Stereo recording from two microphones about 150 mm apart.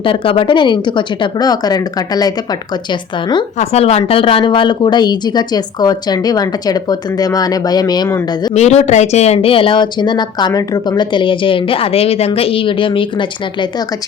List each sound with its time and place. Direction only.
0.0 s a woman's voice: 35° left (ahead or behind)
3.6 s speech: 45° left (ahead or behind); by 8.5 s 25° left (ahead or behind)
8.5 s a woman's voice: 45° left (ahead or behind)